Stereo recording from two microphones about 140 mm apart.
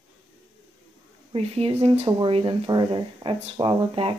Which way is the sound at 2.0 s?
35° right (ahead or behind).